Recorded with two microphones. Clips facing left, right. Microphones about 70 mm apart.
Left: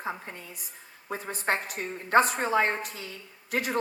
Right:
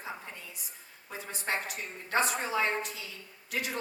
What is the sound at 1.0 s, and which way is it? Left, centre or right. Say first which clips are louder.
A woman's voice: left 6 dB; left.